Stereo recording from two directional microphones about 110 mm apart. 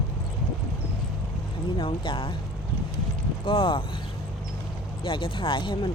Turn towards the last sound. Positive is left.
turn(degrees=45)  # may be behind; listen again after turning